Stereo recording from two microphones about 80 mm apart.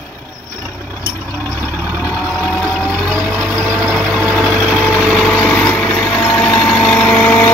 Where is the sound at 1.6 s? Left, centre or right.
Right.